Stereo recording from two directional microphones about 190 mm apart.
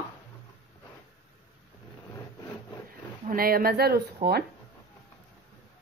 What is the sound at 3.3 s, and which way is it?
Speech, 50° right (ahead or behind).